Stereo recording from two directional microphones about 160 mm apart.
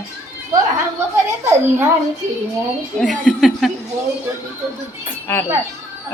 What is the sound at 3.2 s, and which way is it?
Speech, centre (ahead or behind).